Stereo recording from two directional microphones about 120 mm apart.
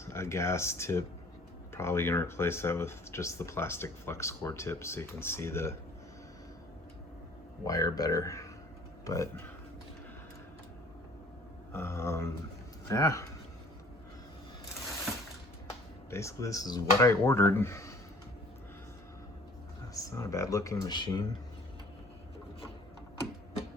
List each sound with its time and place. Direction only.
0.0 s speech: 20° left (ahead or behind)
7.6 s speech: 30° left (ahead or behind)
11.7 s speech: 20° left (ahead or behind)
16.0 s speech: 25° left (ahead or behind)
19.9 s speech: 30° left (ahead or behind)